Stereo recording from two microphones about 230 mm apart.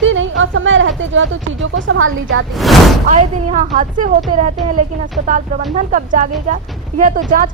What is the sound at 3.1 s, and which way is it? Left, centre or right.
Speech, right.